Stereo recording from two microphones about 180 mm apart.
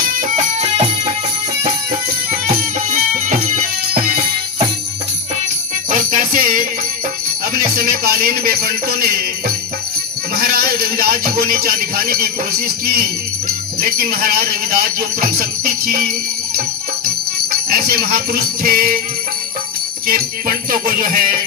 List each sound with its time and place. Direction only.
0.0 s music: 50° right (ahead or behind)
2.9 s music: 45° right (ahead or behind)
5.9 s music: 50° right (ahead or behind)
7.5 s speech: 55° right (ahead or behind)
10.3 s speech: 55° right (ahead or behind)
17.5 s jingle bell: 55° right (ahead or behind)
20.1 s jingle bell: 55° right (ahead or behind)